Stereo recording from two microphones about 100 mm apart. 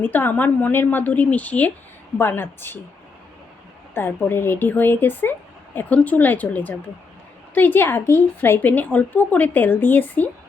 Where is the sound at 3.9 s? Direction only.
20° left (ahead or behind).